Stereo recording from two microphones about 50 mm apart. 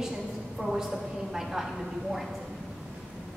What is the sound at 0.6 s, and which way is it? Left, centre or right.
Speech, centre.